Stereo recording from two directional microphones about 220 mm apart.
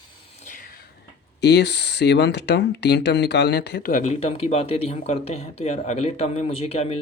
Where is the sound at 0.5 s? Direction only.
40° left (ahead or behind).